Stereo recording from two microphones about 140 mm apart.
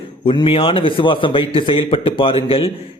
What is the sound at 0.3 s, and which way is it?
A man's voice, 40° left (ahead or behind).